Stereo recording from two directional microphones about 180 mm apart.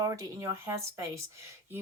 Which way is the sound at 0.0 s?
20° right (ahead or behind).